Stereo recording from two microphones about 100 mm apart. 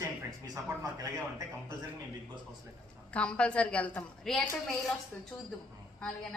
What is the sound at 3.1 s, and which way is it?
A woman's voice, 10° left (ahead or behind).